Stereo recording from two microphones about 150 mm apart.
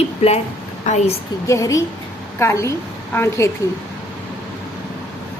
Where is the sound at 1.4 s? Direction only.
20° left (ahead or behind).